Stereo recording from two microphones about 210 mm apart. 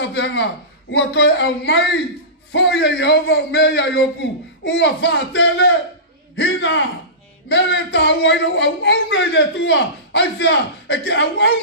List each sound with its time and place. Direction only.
0.0 s a man's voice: 60° left (ahead or behind)
7.4 s a man's voice: 55° left (ahead or behind)